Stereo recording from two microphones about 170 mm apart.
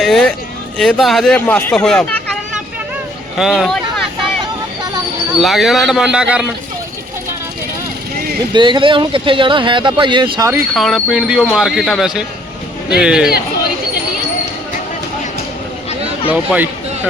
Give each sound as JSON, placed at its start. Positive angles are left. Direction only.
{"t": 0.0, "sound": "speech", "side_deg": 0}
{"t": 3.3, "sound": "speech", "side_deg": 0}
{"t": 5.4, "sound": "speech", "side_deg": 0}
{"t": 8.5, "sound": "speech", "side_deg": -25}
{"t": 10.8, "sound": "speech", "side_deg": 0}
{"t": 16.3, "sound": "speech", "side_deg": -10}